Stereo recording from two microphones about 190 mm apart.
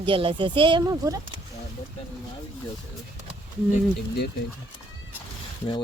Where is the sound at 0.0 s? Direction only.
25° right (ahead or behind).